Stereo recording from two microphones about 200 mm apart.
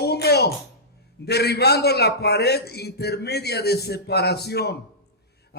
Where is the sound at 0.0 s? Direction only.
55° left (ahead or behind).